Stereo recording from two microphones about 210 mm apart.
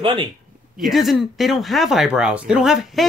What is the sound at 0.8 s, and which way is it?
A woman's voice, centre (ahead or behind).